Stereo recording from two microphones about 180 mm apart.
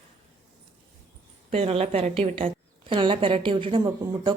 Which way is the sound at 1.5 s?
35° right (ahead or behind).